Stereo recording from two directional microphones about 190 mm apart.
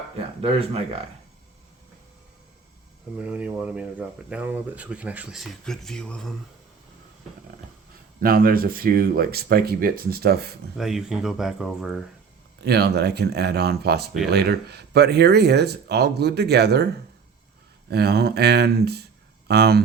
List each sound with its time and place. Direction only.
3.2 s speech: 5° right (ahead or behind)
8.2 s speech: 50° right (ahead or behind)
10.8 s speech: centre (ahead or behind)
12.6 s speech: 60° right (ahead or behind)